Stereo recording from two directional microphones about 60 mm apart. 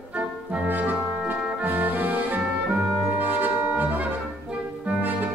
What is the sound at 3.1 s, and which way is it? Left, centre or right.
Brass instrument, right.